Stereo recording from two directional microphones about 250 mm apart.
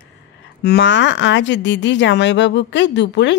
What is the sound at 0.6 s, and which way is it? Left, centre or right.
Speech, left.